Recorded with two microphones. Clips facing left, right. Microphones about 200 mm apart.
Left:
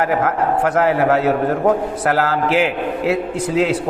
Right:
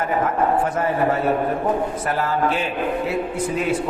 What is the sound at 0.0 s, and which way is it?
A man's voice, 80° left.